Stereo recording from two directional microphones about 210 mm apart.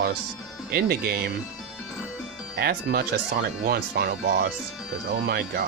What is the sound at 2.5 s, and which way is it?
Speech, 50° right (ahead or behind).